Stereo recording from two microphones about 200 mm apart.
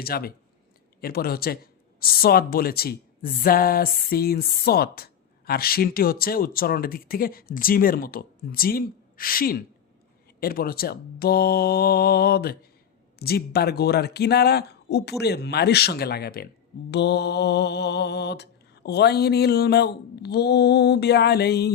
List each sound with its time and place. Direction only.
0.0 s speech: 50° left (ahead or behind)
15.2 s mantra: 55° left (ahead or behind)